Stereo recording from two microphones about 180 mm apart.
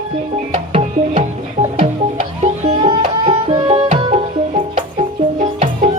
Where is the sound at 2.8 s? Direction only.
25° right (ahead or behind).